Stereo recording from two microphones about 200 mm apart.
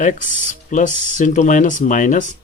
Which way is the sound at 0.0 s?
40° left (ahead or behind).